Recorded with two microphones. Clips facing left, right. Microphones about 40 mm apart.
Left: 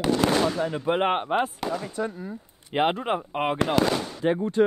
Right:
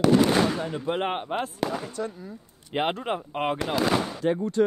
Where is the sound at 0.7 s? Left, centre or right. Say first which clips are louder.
Left 4 dB; centre.